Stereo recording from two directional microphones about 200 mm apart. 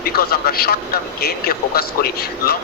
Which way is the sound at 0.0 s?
50° left (ahead or behind).